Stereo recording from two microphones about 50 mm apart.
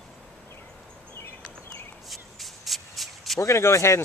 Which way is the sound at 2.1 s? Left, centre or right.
Centre.